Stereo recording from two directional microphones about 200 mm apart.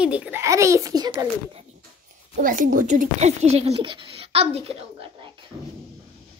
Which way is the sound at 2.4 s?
40° right (ahead or behind).